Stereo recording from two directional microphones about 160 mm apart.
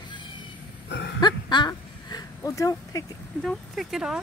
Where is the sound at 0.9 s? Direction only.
90° left.